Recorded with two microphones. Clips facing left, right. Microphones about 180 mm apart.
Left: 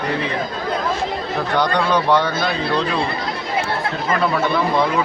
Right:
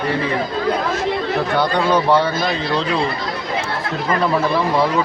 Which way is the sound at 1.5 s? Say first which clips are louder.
Even; 10° right (ahead or behind).